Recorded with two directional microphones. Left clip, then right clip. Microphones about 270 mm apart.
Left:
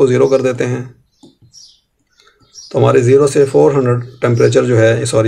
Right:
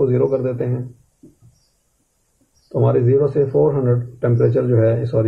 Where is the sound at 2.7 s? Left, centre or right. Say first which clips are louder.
Left 7 dB; left.